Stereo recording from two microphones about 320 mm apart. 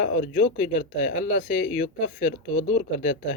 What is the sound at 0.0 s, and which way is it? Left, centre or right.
Speech, left.